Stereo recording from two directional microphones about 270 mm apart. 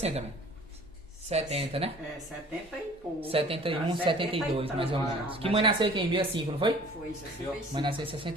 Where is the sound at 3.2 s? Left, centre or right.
Right.